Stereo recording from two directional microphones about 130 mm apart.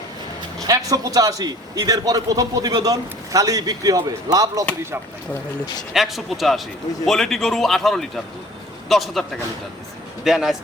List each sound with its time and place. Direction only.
0.9 s a man's voice: 30° right (ahead or behind)
5.9 s a man's voice: centre (ahead or behind)